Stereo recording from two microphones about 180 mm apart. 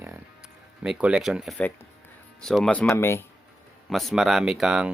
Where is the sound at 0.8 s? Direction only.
5° right (ahead or behind); by 3.2 s 15° left (ahead or behind).